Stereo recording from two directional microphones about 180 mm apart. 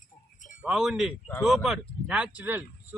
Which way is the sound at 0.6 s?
Centre (ahead or behind).